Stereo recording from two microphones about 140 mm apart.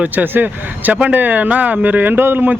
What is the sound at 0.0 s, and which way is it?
Speech, 10° right (ahead or behind).